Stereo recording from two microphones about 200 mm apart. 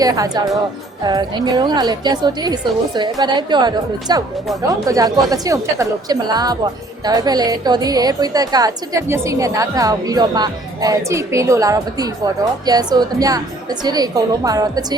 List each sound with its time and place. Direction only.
0.0 s a woman's voice: 20° right (ahead or behind)